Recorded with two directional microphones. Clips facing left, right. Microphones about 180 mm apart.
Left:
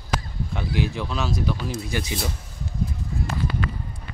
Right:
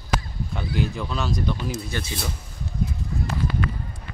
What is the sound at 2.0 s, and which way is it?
Speech, 15° left (ahead or behind).